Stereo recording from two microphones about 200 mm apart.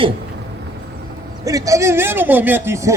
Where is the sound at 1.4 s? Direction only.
15° right (ahead or behind).